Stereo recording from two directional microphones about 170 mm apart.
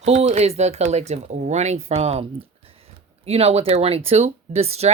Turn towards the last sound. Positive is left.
turn(degrees=-35)  # may be behind; listen again after turning